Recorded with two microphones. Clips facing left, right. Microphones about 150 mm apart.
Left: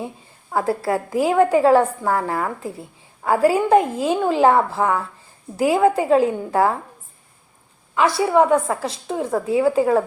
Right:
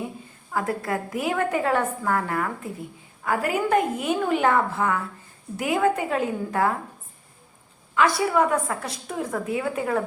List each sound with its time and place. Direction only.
0.5 s a woman's voice: 30° left (ahead or behind)
7.9 s a woman's voice: 25° left (ahead or behind)